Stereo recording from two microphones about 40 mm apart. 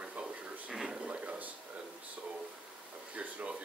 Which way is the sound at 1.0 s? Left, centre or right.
Right.